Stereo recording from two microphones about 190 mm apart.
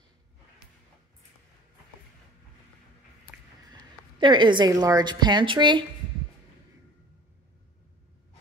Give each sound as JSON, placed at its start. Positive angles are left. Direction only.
{"t": 4.2, "sound": "a woman's voice", "side_deg": -25}